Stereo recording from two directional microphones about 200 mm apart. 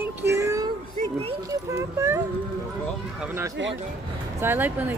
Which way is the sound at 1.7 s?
15° right (ahead or behind).